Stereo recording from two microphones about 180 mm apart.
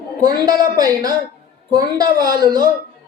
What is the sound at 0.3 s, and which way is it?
A woman's voice, 20° right (ahead or behind).